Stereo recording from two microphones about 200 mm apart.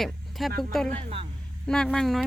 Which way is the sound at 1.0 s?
25° right (ahead or behind).